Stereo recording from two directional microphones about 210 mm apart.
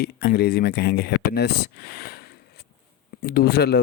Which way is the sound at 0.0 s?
50° left (ahead or behind).